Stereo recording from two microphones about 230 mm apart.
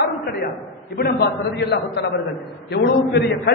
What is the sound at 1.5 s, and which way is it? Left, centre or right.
A man's voice, left.